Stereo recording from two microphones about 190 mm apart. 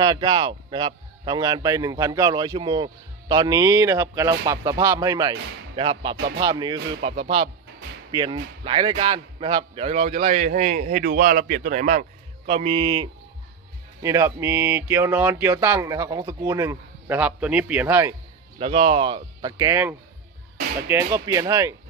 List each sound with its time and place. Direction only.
0.0 s a man's voice: 25° right (ahead or behind)
7.0 s speech: 30° right (ahead or behind)
14.0 s speech: 15° right (ahead or behind)
18.6 s a man's voice: 30° right (ahead or behind)